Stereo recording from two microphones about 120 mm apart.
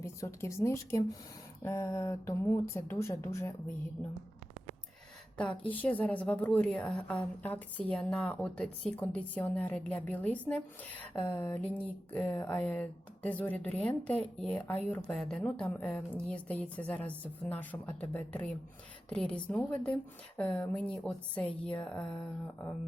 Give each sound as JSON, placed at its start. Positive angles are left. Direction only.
{"t": 0.0, "sound": "speech", "side_deg": 25}
{"t": 5.4, "sound": "a woman's voice", "side_deg": 15}